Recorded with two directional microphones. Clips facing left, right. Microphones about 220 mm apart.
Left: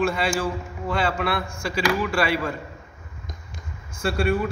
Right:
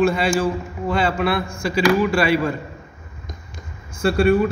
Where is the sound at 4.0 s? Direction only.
30° right (ahead or behind).